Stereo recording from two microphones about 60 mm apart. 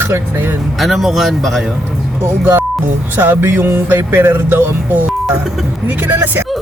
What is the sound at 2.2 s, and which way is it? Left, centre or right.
Speech, right.